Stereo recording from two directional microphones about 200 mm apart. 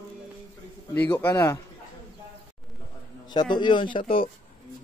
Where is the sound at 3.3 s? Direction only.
20° left (ahead or behind).